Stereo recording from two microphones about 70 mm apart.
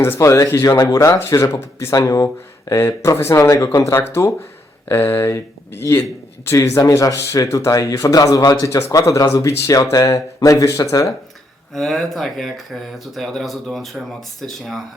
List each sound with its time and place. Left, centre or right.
0.2 s speech: left
1.9 s speech: left
11.7 s speech: centre